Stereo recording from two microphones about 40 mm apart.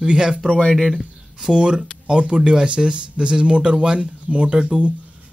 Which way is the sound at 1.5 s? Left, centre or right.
Right.